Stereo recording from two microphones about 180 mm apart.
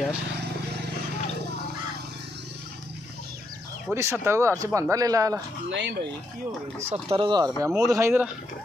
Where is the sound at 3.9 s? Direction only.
15° right (ahead or behind).